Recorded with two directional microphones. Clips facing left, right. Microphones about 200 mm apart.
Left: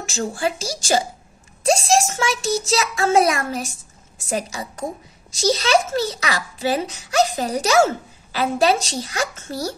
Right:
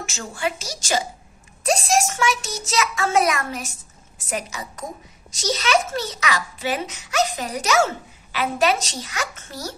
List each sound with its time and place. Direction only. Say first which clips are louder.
0.0 s a child's voice: left 4 dB; 35° left (ahead or behind)